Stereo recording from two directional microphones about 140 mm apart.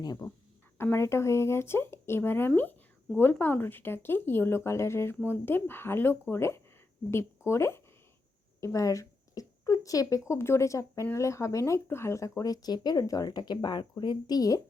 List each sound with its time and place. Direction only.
0.0 s speech: 30° left (ahead or behind)
0.8 s speech: 15° left (ahead or behind)